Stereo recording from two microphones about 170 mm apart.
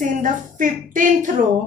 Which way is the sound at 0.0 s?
50° right (ahead or behind).